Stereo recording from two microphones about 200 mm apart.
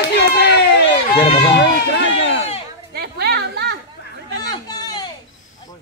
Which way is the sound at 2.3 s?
30° left (ahead or behind).